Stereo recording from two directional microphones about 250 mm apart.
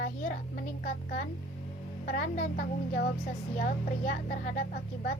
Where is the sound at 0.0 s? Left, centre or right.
Left.